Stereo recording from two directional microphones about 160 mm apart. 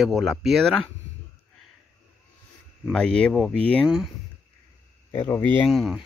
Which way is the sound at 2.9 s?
5° left (ahead or behind).